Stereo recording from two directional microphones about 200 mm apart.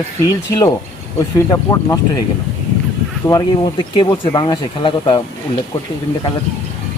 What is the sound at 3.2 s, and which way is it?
Speech, 20° left (ahead or behind).